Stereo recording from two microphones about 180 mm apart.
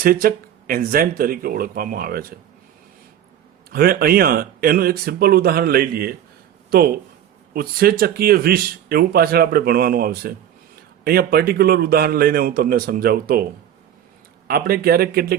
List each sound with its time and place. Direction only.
0.0 s speech: 55° right (ahead or behind)
3.7 s speech: 60° right (ahead or behind)
14.4 s speech: 55° right (ahead or behind)